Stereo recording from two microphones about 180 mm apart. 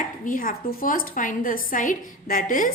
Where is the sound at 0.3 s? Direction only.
50° left (ahead or behind).